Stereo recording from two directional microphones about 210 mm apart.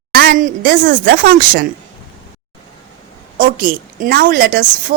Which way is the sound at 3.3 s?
40° right (ahead or behind).